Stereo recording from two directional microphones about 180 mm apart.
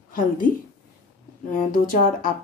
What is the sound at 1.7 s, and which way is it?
Speech, 50° left (ahead or behind).